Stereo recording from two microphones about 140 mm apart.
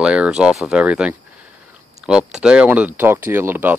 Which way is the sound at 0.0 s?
5° right (ahead or behind).